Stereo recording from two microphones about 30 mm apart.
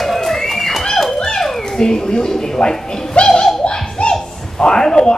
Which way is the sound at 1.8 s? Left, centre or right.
Left.